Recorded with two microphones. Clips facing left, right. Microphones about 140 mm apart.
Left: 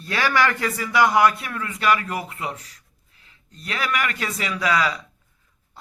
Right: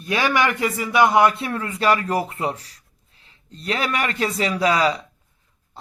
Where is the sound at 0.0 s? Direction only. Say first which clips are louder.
Right 1 dB; 20° right (ahead or behind).